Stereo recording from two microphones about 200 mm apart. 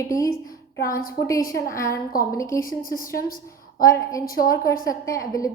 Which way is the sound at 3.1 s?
45° left (ahead or behind).